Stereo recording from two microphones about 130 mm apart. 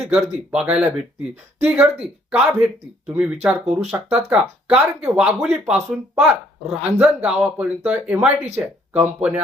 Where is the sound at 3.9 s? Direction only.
20° right (ahead or behind).